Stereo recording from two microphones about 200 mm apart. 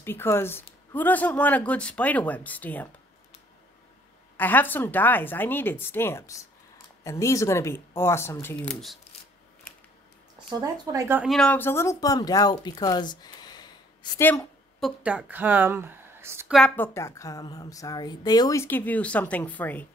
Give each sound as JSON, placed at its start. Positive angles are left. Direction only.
{"t": 0.0, "sound": "a woman's voice", "side_deg": 10}
{"t": 4.4, "sound": "a woman's voice", "side_deg": 10}
{"t": 10.5, "sound": "speech", "side_deg": -15}
{"t": 11.2, "sound": "speech", "side_deg": 5}
{"t": 14.8, "sound": "a woman's voice", "side_deg": 0}
{"t": 16.5, "sound": "a woman's voice", "side_deg": 5}